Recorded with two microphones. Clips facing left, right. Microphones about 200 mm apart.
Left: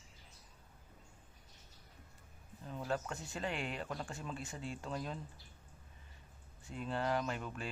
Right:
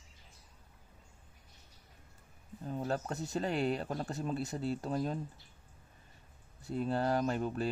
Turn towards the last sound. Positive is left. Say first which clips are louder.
# right 7 dB
turn(degrees=-40)  # may be behind; listen again after turning